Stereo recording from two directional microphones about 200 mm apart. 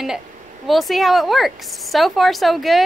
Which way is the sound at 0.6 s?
Centre (ahead or behind).